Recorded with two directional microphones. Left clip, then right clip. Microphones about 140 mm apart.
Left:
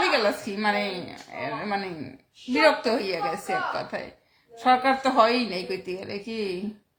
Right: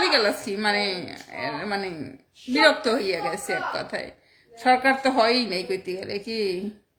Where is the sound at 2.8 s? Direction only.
30° right (ahead or behind).